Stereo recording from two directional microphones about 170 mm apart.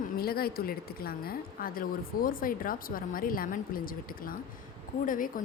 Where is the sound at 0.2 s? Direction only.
60° left (ahead or behind).